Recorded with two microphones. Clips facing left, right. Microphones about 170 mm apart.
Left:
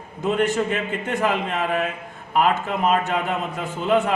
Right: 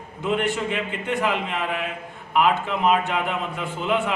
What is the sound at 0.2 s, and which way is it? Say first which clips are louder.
A man's voice: left 3 dB; 40° left (ahead or behind).